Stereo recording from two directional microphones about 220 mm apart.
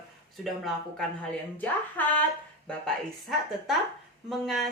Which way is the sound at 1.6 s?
10° left (ahead or behind).